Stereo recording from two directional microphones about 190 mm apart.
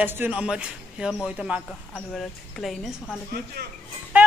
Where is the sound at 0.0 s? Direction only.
10° right (ahead or behind).